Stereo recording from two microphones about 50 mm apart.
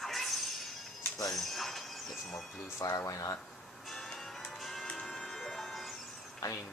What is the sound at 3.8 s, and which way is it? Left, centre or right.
Music, centre.